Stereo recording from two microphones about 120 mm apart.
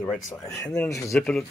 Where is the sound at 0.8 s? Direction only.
25° left (ahead or behind).